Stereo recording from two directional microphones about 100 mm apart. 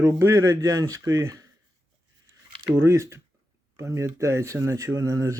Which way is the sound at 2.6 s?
25° right (ahead or behind).